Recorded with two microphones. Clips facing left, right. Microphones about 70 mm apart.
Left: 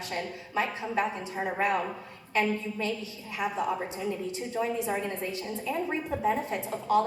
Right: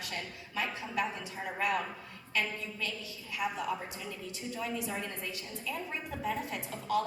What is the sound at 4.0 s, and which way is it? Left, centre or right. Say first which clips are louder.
A woman's voice: left 9 dB; left.